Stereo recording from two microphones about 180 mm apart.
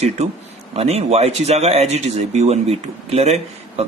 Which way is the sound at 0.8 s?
35° right (ahead or behind).